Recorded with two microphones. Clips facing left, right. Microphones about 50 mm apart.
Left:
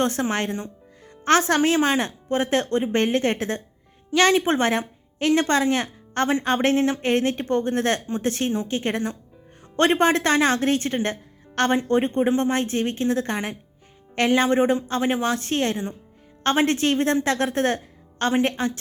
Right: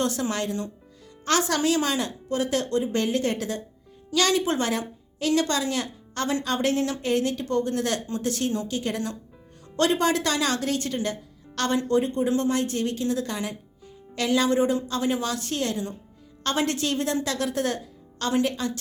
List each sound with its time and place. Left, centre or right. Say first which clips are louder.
0.0 s a woman's voice: left 3 dB; left